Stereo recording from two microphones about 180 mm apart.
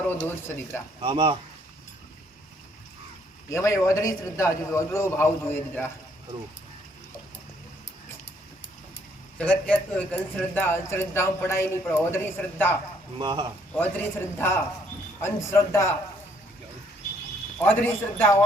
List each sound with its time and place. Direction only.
0.3 s a man's voice: 10° left (ahead or behind)
1.0 s speech: 25° right (ahead or behind)
3.5 s a man's voice: 15° left (ahead or behind)
9.4 s a man's voice: 5° left (ahead or behind)
13.1 s speech: 25° right (ahead or behind)
13.7 s a man's voice: 10° left (ahead or behind)
17.6 s a man's voice: 10° left (ahead or behind)